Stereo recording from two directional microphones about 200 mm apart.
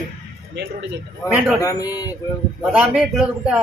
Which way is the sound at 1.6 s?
15° left (ahead or behind).